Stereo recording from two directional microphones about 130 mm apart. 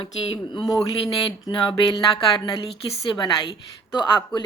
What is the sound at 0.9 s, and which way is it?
Speech, 35° left (ahead or behind).